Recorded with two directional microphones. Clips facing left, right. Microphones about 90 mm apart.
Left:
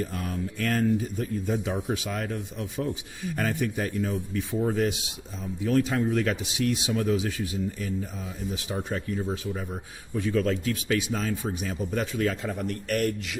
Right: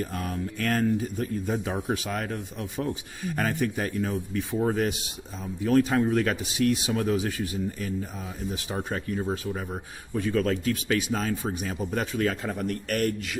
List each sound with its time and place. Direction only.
0.6 s speech: 45° right (ahead or behind)
8.9 s speech: 45° right (ahead or behind)